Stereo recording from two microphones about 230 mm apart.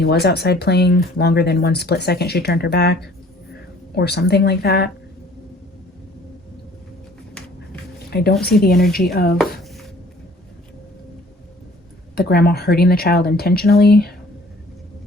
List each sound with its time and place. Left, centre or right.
0.0 s speech: left
8.1 s speech: left
12.1 s speech: left